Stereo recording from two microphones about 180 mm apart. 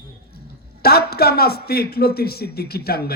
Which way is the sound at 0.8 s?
60° left (ahead or behind).